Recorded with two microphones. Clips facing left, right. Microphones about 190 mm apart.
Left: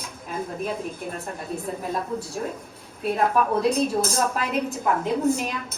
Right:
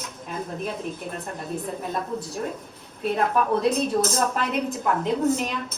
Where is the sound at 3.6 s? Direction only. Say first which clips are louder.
Even; centre (ahead or behind).